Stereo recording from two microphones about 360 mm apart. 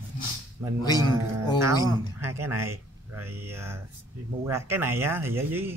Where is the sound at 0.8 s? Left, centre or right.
Centre.